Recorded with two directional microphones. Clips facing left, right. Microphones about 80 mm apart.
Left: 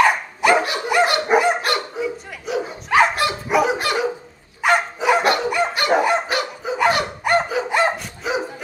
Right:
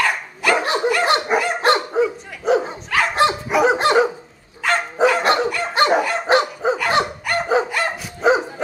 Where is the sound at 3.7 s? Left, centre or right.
Right.